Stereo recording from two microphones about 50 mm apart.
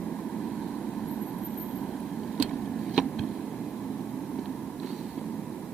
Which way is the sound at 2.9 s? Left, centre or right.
Centre.